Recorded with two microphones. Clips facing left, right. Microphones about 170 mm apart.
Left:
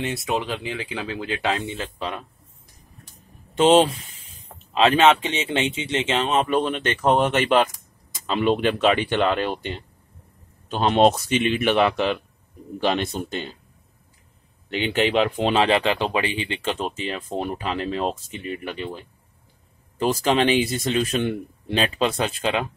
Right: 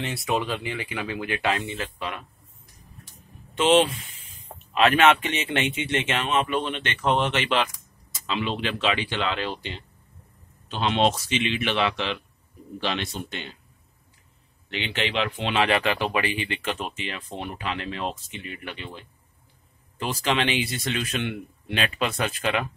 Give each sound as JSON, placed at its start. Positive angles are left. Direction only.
{"t": 0.1, "sound": "speech", "side_deg": 20}
{"t": 3.5, "sound": "speech", "side_deg": 35}
{"t": 14.7, "sound": "speech", "side_deg": 45}
{"t": 15.6, "sound": "speech", "side_deg": 25}
{"t": 20.0, "sound": "speech", "side_deg": 40}